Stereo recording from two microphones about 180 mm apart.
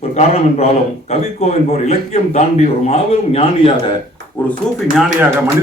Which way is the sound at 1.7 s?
35° left (ahead or behind).